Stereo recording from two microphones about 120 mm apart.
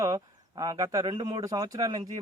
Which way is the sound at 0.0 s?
30° right (ahead or behind).